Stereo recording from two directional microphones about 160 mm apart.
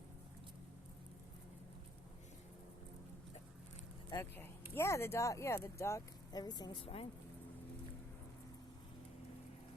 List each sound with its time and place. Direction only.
4.1 s speech: 15° left (ahead or behind); by 7.1 s 35° left (ahead or behind)